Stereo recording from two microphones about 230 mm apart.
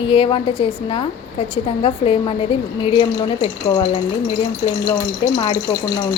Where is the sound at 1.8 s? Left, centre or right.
Left.